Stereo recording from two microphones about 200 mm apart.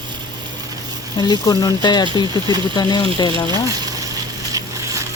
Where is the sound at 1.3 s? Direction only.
20° left (ahead or behind).